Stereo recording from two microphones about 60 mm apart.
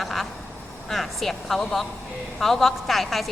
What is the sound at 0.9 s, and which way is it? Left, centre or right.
A woman's voice, centre.